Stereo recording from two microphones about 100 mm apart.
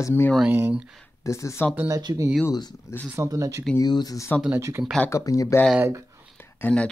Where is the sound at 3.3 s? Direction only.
35° right (ahead or behind).